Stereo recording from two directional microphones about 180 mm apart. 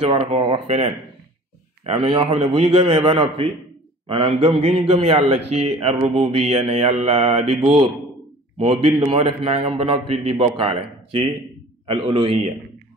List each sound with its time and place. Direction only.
0.0 s a man's voice: 35° right (ahead or behind)
1.9 s a man's voice: 30° right (ahead or behind)